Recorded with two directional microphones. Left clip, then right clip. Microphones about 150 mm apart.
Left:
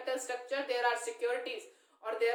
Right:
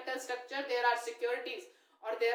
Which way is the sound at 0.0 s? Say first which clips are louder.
Left 2 dB; 20° left (ahead or behind).